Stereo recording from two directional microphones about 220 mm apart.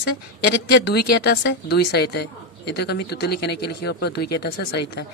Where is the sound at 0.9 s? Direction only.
45° left (ahead or behind).